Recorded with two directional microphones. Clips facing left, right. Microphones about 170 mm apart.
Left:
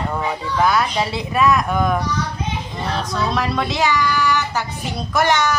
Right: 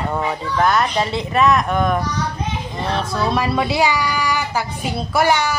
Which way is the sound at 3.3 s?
5° right (ahead or behind).